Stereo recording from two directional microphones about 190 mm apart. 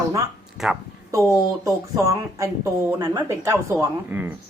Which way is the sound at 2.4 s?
15° right (ahead or behind).